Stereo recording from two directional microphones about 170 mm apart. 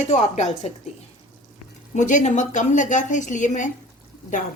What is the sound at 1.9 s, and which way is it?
Speech, 45° left (ahead or behind).